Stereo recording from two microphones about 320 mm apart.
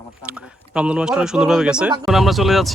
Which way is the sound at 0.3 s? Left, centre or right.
Centre.